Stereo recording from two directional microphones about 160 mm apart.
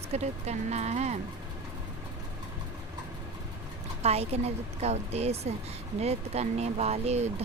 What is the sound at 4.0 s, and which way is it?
Speech, 40° right (ahead or behind).